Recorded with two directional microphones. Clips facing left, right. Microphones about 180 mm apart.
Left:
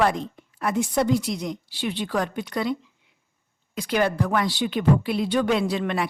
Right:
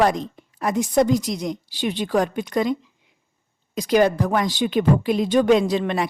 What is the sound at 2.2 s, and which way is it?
Speech, 45° right (ahead or behind).